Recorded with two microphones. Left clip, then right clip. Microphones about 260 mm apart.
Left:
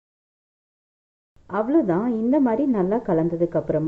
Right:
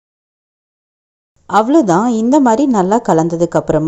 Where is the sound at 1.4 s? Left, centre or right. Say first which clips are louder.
Right 10 dB; right.